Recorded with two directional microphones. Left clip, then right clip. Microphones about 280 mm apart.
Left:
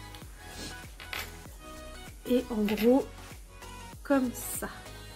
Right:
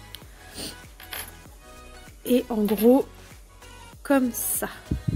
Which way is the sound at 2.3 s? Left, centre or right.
Right.